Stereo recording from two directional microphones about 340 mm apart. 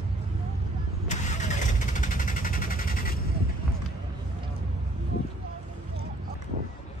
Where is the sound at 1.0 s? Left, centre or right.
Left.